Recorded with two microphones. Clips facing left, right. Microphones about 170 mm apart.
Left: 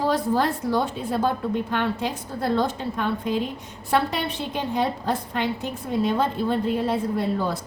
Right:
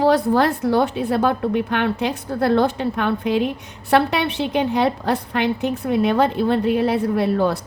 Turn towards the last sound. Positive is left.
turn(degrees=-70)  # may be behind; listen again after turning